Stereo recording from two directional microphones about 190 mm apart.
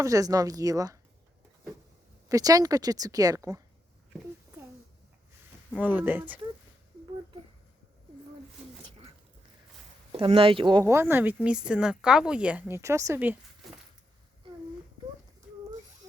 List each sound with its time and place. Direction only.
0.0 s speech: 20° right (ahead or behind)
2.3 s speech: 20° right (ahead or behind)
5.7 s speech: 10° right (ahead or behind)
10.1 s speech: 30° right (ahead or behind); by 13.3 s 15° right (ahead or behind)